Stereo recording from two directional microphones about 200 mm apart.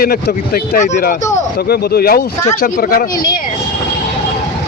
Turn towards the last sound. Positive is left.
turn(degrees=45)  # may be behind; listen again after turning